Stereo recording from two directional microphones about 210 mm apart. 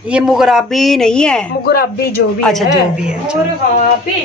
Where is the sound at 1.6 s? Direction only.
45° left (ahead or behind).